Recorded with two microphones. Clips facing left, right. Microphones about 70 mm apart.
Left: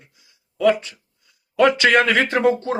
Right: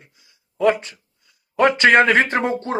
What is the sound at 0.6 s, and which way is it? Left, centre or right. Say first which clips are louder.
Speech: even; right.